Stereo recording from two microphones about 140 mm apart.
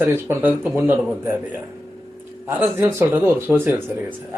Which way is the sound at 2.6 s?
20° right (ahead or behind).